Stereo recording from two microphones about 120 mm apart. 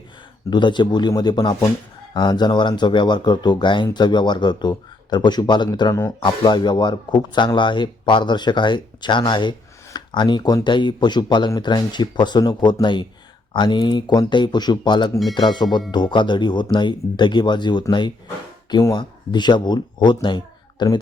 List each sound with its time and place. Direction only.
0.5 s speech: 40° left (ahead or behind)